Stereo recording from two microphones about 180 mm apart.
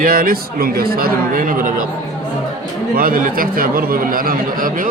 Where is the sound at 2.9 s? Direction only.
55° right (ahead or behind).